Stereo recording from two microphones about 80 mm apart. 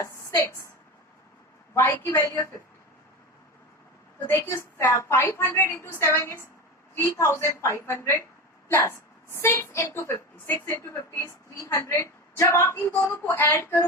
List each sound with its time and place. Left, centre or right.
0.0 s a sound: left
1.7 s a woman's voice: left
4.3 s a woman's voice: left
13.2 s a woman's voice: left